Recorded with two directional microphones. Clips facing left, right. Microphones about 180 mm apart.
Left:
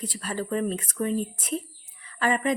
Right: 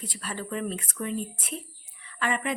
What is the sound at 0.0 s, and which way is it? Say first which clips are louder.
A woman's voice: left 5 dB; 40° left (ahead or behind).